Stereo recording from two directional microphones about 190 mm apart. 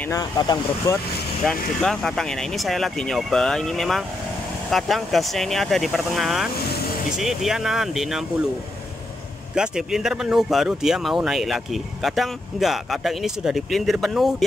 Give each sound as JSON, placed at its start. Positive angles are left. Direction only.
{"t": 0.1, "sound": "speech", "side_deg": 20}
{"t": 1.4, "sound": "speech", "side_deg": 5}
{"t": 9.6, "sound": "speech", "side_deg": -5}